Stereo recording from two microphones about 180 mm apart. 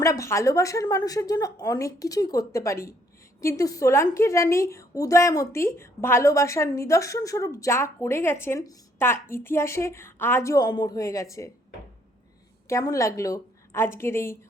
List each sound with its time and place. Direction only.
0.0 s a woman's voice: 15° left (ahead or behind)
12.6 s a woman's voice: 15° left (ahead or behind)